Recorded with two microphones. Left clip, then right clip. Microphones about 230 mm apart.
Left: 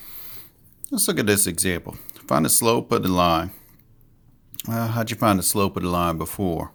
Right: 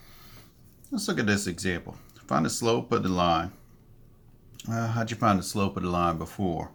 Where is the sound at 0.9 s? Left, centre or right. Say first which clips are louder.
Left 6 dB; left.